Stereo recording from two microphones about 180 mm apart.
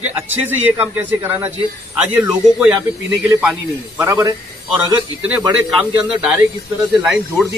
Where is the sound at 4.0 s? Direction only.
15° right (ahead or behind).